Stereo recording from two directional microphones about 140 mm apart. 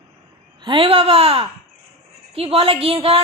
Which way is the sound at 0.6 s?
40° right (ahead or behind).